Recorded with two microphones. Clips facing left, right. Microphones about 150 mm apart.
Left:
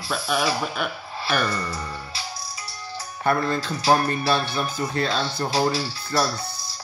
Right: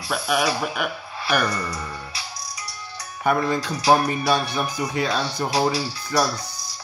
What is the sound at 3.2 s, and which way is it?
Speech, 15° right (ahead or behind).